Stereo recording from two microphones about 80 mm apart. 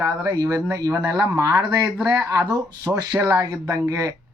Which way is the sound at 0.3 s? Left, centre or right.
Right.